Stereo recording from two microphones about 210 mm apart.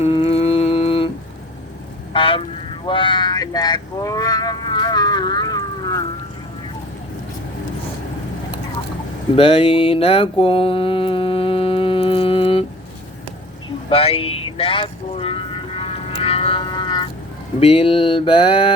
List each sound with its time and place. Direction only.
0.0 s humming: 25° left (ahead or behind)
2.1 s vehicle: 25° left (ahead or behind)
2.8 s speech: 25° left (ahead or behind)
9.3 s mantra: 25° left (ahead or behind)
13.9 s vehicle: 25° left (ahead or behind)
17.6 s mantra: 30° left (ahead or behind)